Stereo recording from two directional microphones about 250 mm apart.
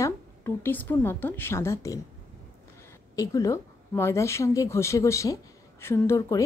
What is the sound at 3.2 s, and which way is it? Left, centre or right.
A woman's voice, centre.